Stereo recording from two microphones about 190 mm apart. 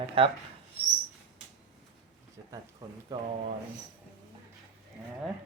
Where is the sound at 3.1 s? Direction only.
20° right (ahead or behind).